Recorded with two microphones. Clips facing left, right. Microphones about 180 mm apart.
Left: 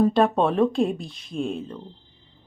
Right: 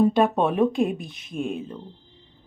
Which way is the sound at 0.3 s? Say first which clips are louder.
Left 1 dB; 15° right (ahead or behind).